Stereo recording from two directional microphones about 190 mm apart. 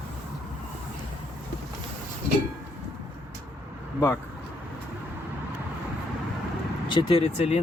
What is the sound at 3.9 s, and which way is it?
Speech, 15° left (ahead or behind).